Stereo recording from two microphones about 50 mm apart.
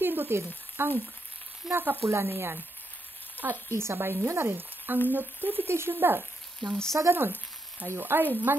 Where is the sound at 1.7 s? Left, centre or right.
Right.